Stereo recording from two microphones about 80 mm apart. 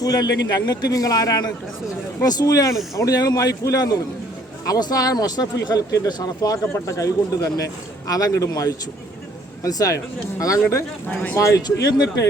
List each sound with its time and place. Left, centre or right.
0.0 s speech: left
6.7 s speech: left
11.1 s speech: centre
11.3 s speech: left